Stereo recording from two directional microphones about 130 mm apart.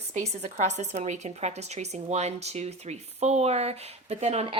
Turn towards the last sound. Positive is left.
turn(degrees=-55)  # may be behind; listen again after turning